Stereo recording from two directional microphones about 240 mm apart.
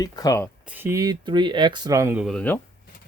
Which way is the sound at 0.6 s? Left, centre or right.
Centre.